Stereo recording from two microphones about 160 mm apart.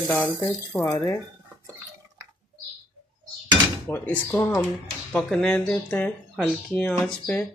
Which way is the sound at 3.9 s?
10° left (ahead or behind).